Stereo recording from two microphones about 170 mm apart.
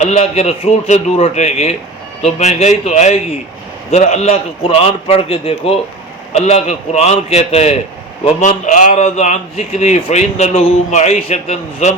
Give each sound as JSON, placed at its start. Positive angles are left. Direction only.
{"t": 0.0, "sound": "a man's voice", "side_deg": 40}